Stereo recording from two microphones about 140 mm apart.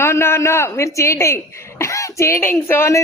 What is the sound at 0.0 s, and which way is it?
A man's voice, 20° left (ahead or behind).